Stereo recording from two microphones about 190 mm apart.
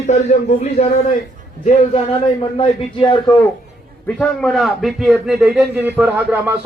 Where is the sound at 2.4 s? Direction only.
25° left (ahead or behind).